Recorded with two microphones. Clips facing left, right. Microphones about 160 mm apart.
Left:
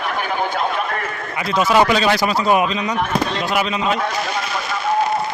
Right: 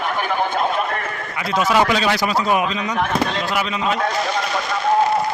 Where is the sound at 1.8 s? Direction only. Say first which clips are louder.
Left 4 dB; 35° left (ahead or behind).